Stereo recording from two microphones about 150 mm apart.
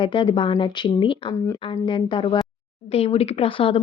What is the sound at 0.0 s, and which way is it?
Speech, 35° left (ahead or behind).